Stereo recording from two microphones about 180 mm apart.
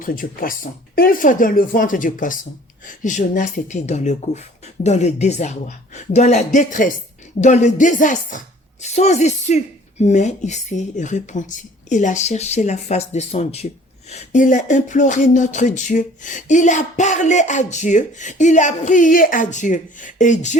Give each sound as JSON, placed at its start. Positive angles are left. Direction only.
{"t": 0.0, "sound": "speech", "side_deg": 50}
{"t": 14.1, "sound": "speech", "side_deg": 45}